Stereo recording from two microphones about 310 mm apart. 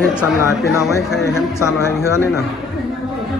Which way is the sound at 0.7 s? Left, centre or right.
Centre.